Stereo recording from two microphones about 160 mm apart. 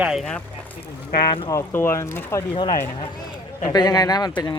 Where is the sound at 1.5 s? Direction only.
15° left (ahead or behind).